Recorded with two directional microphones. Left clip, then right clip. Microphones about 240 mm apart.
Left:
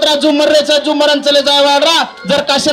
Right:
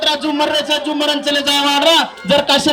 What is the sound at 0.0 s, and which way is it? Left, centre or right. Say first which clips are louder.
A man's voice: left 6 dB; left.